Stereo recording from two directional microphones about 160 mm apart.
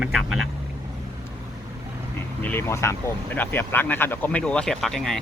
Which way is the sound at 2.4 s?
15° left (ahead or behind).